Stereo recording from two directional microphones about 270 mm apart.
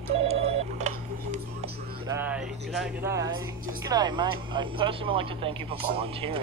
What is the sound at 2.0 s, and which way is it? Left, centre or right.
A woman's voice, centre.